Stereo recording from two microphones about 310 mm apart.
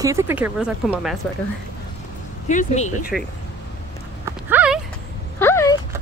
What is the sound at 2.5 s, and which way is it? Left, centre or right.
Speech, left.